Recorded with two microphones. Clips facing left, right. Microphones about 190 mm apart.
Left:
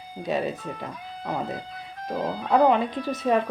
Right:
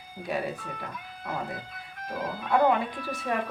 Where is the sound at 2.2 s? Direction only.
35° left (ahead or behind).